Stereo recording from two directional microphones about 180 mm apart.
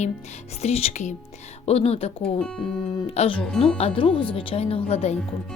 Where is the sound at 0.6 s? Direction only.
35° left (ahead or behind).